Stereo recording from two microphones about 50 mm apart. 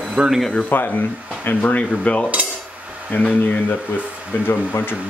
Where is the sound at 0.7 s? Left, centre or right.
Left.